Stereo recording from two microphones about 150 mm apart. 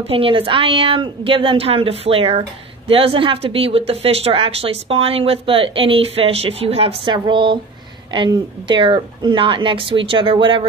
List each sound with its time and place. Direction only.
0.0 s speech: 40° right (ahead or behind)